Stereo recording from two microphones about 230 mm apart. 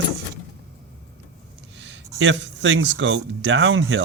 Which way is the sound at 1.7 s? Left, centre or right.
Right.